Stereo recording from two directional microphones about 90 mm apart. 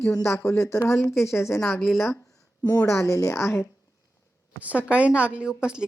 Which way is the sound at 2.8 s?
35° left (ahead or behind).